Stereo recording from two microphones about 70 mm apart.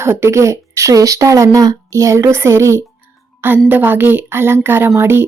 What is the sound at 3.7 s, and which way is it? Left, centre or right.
Speech, right.